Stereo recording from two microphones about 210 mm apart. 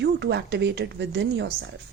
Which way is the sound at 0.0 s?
55° right (ahead or behind).